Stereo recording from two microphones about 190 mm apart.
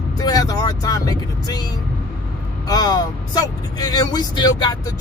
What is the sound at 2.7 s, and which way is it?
Speech, 20° left (ahead or behind).